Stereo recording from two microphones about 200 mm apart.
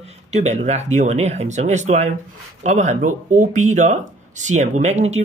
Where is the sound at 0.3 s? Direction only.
35° right (ahead or behind).